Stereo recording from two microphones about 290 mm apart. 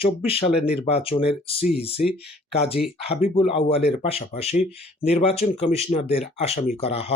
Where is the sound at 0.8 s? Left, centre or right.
Centre.